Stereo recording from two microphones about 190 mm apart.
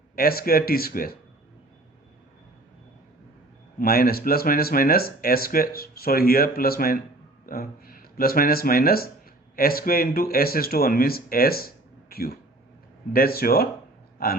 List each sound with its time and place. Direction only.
0.2 s speech: 50° left (ahead or behind)
3.8 s speech: 50° left (ahead or behind)